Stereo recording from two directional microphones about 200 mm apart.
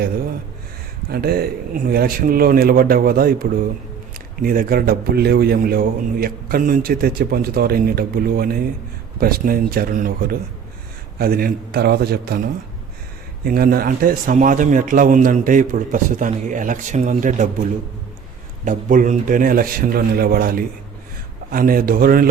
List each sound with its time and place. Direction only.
1.1 s a man's voice: 50° right (ahead or behind)
13.4 s a man's voice: 50° right (ahead or behind)
18.6 s a man's voice: 40° right (ahead or behind)